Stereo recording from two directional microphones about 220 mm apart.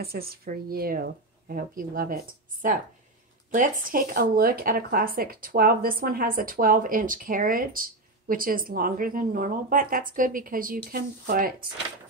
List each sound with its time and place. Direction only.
0.0 s speech: 45° right (ahead or behind)
3.5 s speech: 35° right (ahead or behind)